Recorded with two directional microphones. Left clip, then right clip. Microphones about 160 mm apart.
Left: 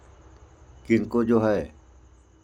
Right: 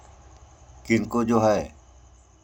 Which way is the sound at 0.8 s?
15° left (ahead or behind).